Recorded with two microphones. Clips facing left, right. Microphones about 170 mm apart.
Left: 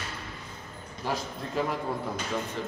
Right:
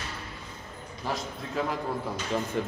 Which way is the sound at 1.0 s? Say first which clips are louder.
Left 1 dB; centre (ahead or behind).